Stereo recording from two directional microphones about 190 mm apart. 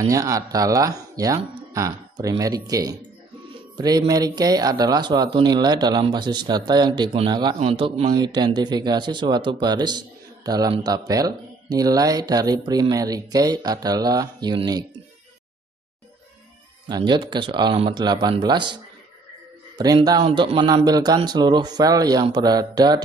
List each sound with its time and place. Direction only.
0.0 s speech: 15° right (ahead or behind)
16.9 s speech: 25° right (ahead or behind)
20.1 s speech: 25° right (ahead or behind)